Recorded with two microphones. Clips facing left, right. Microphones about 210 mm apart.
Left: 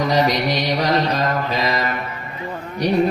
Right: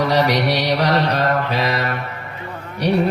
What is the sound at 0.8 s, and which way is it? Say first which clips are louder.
Mantra: right 1 dB; 65° right (ahead or behind).